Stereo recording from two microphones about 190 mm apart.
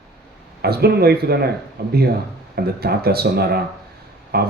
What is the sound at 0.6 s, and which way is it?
Speech, 55° right (ahead or behind).